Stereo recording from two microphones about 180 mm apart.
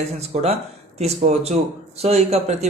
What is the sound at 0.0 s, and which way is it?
Speech, 35° right (ahead or behind).